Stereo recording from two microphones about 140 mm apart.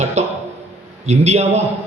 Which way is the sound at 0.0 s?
55° right (ahead or behind).